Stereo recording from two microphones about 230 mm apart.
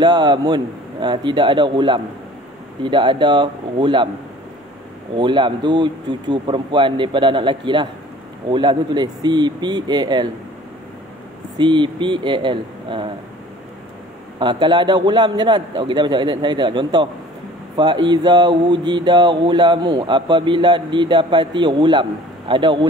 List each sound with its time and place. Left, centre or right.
0.0 s speech: centre
5.1 s speech: right
11.5 s speech: right
14.4 s speech: centre